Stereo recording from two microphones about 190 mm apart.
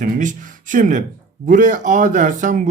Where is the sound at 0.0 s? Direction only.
40° right (ahead or behind).